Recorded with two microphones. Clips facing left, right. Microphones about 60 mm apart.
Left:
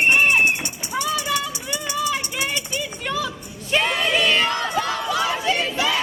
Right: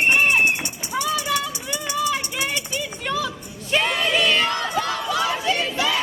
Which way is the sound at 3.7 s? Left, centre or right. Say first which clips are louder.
Even; centre.